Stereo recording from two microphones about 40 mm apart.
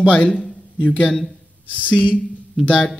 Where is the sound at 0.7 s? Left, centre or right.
Left.